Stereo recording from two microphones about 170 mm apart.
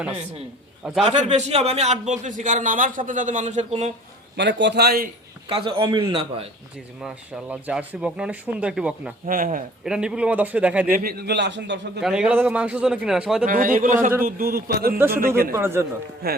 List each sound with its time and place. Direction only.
1.0 s a man's voice: 40° right (ahead or behind)
4.4 s a man's voice: 90° right; by 5.0 s 65° right (ahead or behind)
5.5 s a man's voice: 30° right (ahead or behind)
7.0 s speech: 5° right (ahead or behind)
9.2 s a man's voice: 55° right (ahead or behind)
9.8 s speech: 5° right (ahead or behind)
10.9 s a man's voice: 60° right (ahead or behind); by 12.0 s 90° right
12.0 s a man's voice: 5° right (ahead or behind)
13.4 s a man's voice: 55° right (ahead or behind)
14.9 s speech: 15° right (ahead or behind)
16.2 s a man's voice: 65° right (ahead or behind)